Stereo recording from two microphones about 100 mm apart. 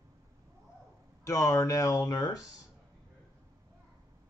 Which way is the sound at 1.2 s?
30° left (ahead or behind).